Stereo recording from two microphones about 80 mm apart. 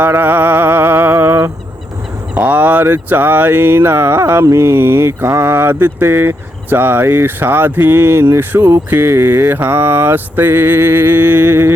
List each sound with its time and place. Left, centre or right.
0.0 s speech: right